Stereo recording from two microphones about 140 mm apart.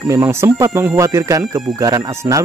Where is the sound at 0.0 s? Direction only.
20° right (ahead or behind).